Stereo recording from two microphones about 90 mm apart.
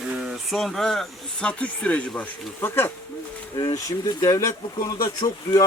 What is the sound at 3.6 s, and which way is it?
Speech, 45° left (ahead or behind).